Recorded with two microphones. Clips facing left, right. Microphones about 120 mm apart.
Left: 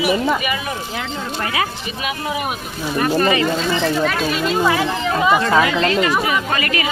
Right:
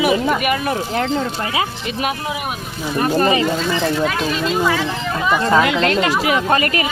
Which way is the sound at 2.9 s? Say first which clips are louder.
Right 1 dB; 30° right (ahead or behind).